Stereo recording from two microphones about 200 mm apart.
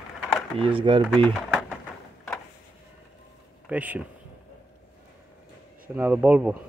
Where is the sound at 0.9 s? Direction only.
25° right (ahead or behind).